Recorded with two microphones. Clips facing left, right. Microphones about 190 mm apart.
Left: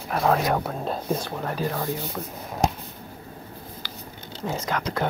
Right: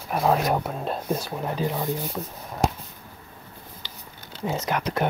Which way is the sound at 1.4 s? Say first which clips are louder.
Right 1 dB; 15° right (ahead or behind).